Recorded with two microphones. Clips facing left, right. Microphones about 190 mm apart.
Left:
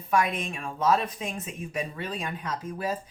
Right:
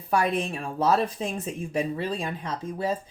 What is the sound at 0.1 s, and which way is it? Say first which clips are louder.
Speech: right 2 dB; 35° right (ahead or behind).